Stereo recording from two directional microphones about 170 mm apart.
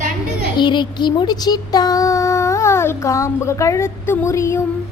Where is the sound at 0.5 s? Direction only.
25° left (ahead or behind).